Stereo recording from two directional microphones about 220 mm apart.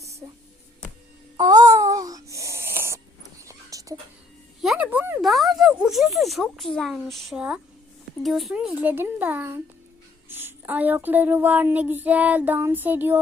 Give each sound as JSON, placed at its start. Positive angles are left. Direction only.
{"t": 0.2, "sound": "music", "side_deg": -15}
{"t": 1.4, "sound": "a sound", "side_deg": -15}
{"t": 4.6, "sound": "speech", "side_deg": -5}
{"t": 8.2, "sound": "child singing", "side_deg": 0}